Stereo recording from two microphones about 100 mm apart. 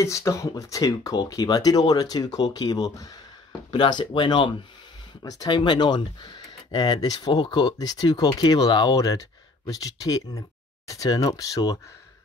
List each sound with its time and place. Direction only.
0.0 s speech: 30° left (ahead or behind)
3.7 s speech: 50° left (ahead or behind)
5.5 s speech: 50° left (ahead or behind)